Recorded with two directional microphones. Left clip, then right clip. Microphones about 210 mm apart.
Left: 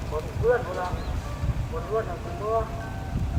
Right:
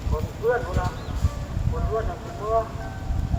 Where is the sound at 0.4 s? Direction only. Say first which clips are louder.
Even; 50° right (ahead or behind).